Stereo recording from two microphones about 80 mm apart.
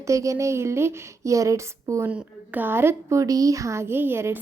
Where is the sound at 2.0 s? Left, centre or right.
Centre.